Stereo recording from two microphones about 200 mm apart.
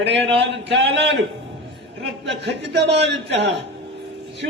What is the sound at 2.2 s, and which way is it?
Speech, 60° right (ahead or behind).